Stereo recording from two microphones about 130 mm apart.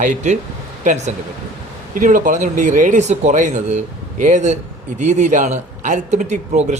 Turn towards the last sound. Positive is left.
turn(degrees=-60)  # may be behind; listen again after turning